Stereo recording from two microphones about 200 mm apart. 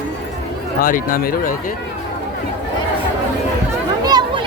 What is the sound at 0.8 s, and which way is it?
Speech, 45° left (ahead or behind).